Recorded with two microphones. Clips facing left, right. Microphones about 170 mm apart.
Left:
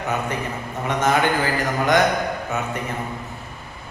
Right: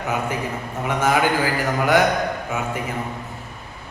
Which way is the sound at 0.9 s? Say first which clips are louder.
Even; 10° right (ahead or behind).